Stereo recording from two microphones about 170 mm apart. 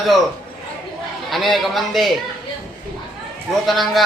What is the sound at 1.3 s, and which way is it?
Speech, centre (ahead or behind).